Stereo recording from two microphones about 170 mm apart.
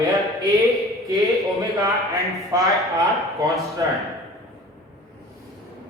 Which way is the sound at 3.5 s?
Centre (ahead or behind).